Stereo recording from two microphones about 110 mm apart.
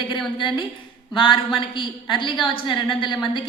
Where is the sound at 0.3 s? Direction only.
50° left (ahead or behind).